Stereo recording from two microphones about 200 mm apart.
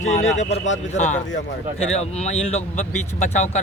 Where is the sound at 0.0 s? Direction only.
35° left (ahead or behind).